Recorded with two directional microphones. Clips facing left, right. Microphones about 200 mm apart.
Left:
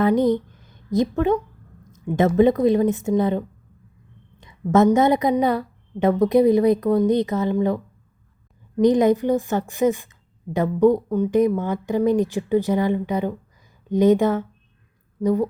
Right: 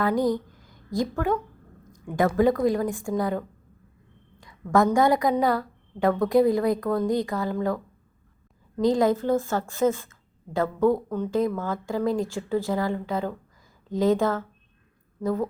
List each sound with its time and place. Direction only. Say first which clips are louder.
0.0 s a woman's voice: left 5 dB; 20° left (ahead or behind)
4.7 s a woman's voice: left 4 dB; 20° left (ahead or behind)
8.8 s a woman's voice: left 5 dB; 20° left (ahead or behind)